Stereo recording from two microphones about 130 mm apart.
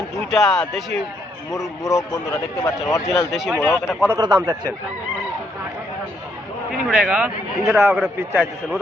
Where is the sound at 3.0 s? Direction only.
Centre (ahead or behind).